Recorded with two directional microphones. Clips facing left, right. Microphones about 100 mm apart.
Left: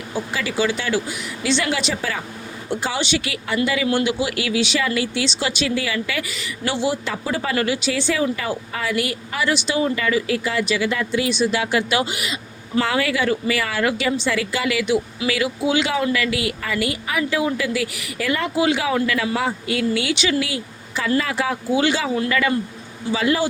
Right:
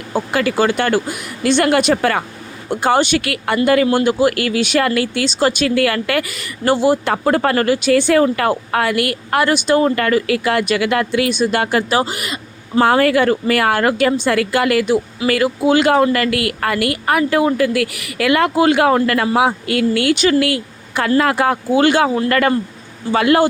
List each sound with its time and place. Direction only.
0.1 s a woman's voice: 60° right (ahead or behind)
2.6 s a woman's voice: 50° right (ahead or behind)